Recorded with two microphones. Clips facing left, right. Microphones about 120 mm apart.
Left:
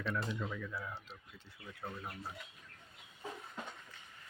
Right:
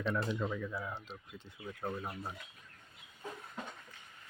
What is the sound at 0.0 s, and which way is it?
Speech, 20° right (ahead or behind).